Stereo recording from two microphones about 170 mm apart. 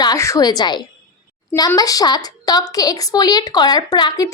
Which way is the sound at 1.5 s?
20° left (ahead or behind).